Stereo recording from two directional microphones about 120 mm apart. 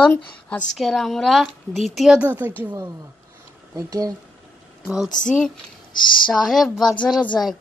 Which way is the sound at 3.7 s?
30° right (ahead or behind).